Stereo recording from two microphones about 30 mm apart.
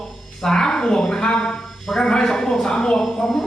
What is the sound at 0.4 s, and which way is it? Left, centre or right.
A man's voice, left.